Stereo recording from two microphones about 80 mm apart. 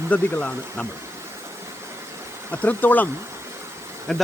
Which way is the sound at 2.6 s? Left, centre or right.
Left.